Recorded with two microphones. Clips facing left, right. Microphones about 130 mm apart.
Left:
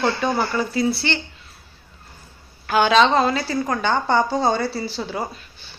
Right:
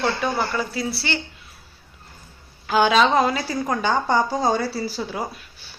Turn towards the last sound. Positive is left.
turn(degrees=-5)  # may be behind; listen again after turning